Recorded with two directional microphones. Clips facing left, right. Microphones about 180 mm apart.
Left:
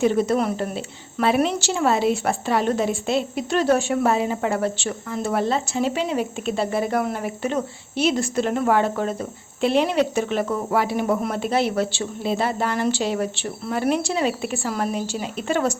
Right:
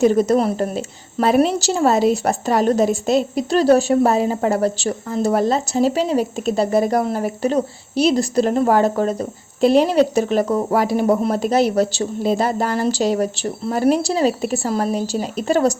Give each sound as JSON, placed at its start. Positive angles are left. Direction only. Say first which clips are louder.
{"t": 0.0, "sound": "a woman's voice", "louder": "right 5 dB", "side_deg": -40}